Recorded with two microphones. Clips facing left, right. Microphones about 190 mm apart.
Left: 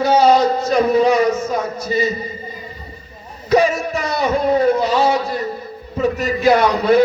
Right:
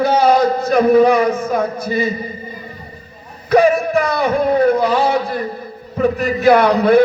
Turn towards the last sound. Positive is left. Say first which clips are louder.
# right 2 dB
turn(degrees=-55)  # may be behind; listen again after turning